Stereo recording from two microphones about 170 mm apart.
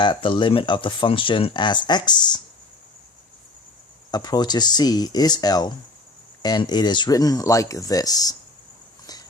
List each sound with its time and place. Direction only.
0.0 s speech: 30° left (ahead or behind)
4.1 s speech: 25° left (ahead or behind)